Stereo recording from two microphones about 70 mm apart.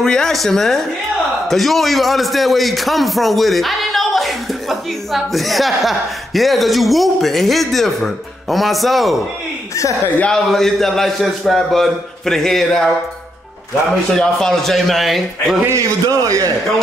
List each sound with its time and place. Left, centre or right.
0.0 s a man's voice: centre
10.2 s a man's voice: centre
14.1 s a man's voice: centre
16.1 s a man's voice: right